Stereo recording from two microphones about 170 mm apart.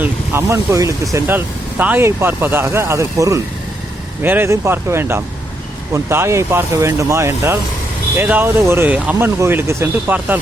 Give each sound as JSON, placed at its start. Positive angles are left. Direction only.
{"t": 0.0, "sound": "vehicle", "side_deg": -15}
{"t": 1.8, "sound": "speech", "side_deg": -10}